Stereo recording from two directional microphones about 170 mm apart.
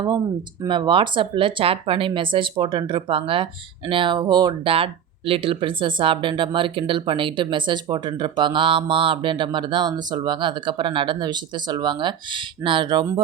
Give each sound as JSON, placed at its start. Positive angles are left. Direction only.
{"t": 0.6, "sound": "speech", "side_deg": -25}